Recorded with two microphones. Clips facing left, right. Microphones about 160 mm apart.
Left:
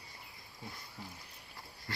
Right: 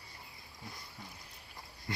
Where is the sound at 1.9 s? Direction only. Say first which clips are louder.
Right 4 dB; 20° right (ahead or behind).